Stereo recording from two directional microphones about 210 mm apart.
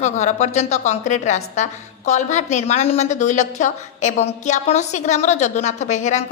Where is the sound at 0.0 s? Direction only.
35° left (ahead or behind).